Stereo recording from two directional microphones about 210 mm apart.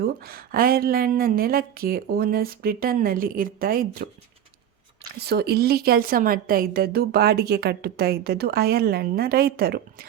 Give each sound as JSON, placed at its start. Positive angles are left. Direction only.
{"t": 0.0, "sound": "a woman's voice", "side_deg": -45}
{"t": 5.2, "sound": "a woman's voice", "side_deg": -50}